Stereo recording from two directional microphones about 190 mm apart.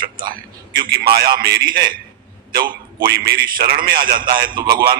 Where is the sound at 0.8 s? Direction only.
55° right (ahead or behind).